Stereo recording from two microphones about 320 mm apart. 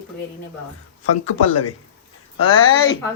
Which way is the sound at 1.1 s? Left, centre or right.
Left.